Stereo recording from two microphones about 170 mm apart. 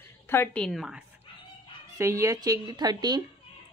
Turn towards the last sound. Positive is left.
turn(degrees=-25)  # may be behind; listen again after turning